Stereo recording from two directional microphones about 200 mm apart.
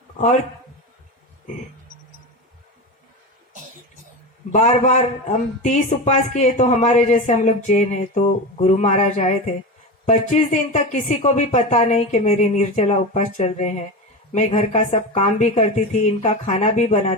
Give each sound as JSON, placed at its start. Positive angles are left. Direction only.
{"t": 4.5, "sound": "speech", "side_deg": 35}